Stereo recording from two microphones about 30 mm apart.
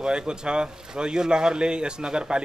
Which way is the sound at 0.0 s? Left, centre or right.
Right.